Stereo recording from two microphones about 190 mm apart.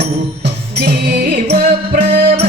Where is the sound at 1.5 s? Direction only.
55° right (ahead or behind).